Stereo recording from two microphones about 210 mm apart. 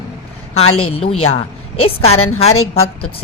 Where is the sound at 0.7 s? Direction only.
90° left.